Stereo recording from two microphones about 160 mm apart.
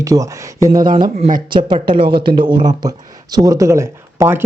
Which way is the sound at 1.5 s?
30° right (ahead or behind).